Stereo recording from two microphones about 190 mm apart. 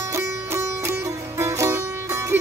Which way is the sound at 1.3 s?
15° right (ahead or behind).